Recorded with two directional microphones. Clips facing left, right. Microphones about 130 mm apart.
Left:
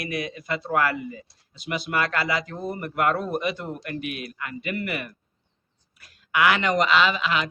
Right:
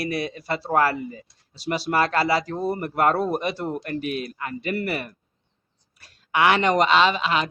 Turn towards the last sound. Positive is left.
turn(degrees=-35)  # may be behind; listen again after turning